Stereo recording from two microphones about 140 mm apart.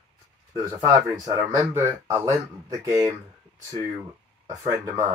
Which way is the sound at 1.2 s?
25° right (ahead or behind).